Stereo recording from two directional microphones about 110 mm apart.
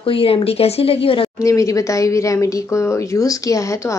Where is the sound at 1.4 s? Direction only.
30° left (ahead or behind).